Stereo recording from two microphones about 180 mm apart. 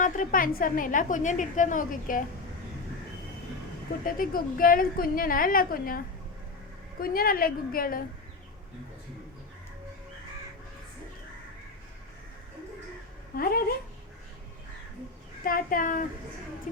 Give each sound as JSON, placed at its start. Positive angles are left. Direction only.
{"t": 0.0, "sound": "a woman's voice", "side_deg": 50}
{"t": 4.0, "sound": "a woman's voice", "side_deg": 50}
{"t": 7.0, "sound": "a woman's voice", "side_deg": 55}
{"t": 13.3, "sound": "speech", "side_deg": 55}
{"t": 15.4, "sound": "a woman's voice", "side_deg": 50}